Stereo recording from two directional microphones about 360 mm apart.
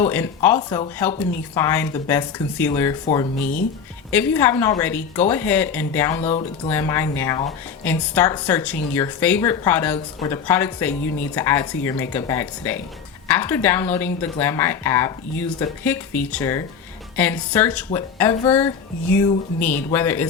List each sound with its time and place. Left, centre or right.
0.0 s speech: centre
6.1 s speech: centre